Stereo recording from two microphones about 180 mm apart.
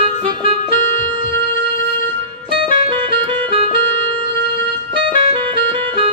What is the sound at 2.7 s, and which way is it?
Music, 30° right (ahead or behind).